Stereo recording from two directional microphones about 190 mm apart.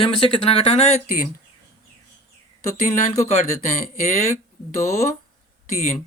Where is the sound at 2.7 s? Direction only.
45° left (ahead or behind).